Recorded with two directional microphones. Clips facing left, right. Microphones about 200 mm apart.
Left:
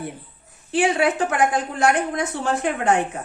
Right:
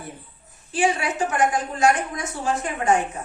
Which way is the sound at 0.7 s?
65° left (ahead or behind).